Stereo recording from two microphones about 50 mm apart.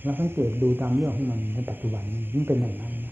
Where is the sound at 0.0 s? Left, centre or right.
Right.